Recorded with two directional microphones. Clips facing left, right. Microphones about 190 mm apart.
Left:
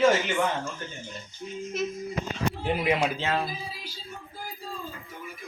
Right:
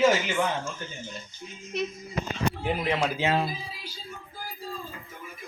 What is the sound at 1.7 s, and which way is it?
Speech, centre (ahead or behind).